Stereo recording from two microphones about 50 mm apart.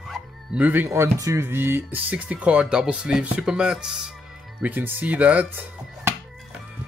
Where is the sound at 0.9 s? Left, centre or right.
Right.